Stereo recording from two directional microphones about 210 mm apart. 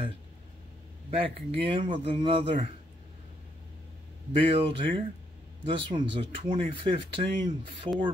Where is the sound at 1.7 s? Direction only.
25° right (ahead or behind).